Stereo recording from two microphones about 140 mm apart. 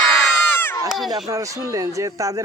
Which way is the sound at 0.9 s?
Centre (ahead or behind).